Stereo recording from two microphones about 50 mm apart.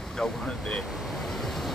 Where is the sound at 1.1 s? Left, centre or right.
Centre.